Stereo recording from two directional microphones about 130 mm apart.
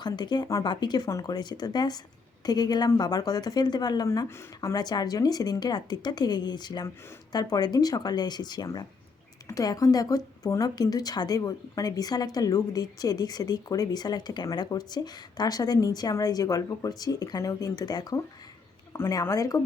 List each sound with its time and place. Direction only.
0.0 s a woman's voice: 35° left (ahead or behind)
18.9 s a woman's voice: 20° left (ahead or behind)